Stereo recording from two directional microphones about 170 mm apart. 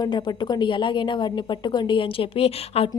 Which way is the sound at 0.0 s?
25° left (ahead or behind).